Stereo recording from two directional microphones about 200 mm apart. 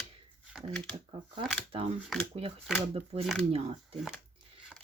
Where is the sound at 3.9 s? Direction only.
5° right (ahead or behind).